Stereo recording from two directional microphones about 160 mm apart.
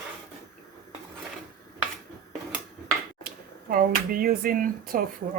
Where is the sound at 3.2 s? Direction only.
65° right (ahead or behind).